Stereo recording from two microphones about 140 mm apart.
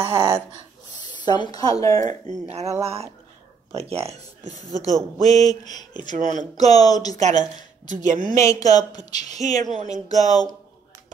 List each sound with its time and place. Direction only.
0.0 s speech: 35° right (ahead or behind)
0.6 s speech: 30° left (ahead or behind)
2.4 s speech: 50° right (ahead or behind)
4.6 s speech: 25° left (ahead or behind)
6.1 s a woman's voice: 65° right (ahead or behind)
6.5 s speech: 25° left (ahead or behind)
7.2 s a woman's voice: 60° right (ahead or behind)
8.4 s speech: 25° left (ahead or behind)
9.1 s a woman's voice: 55° right (ahead or behind)
10.0 s speech: 25° left (ahead or behind)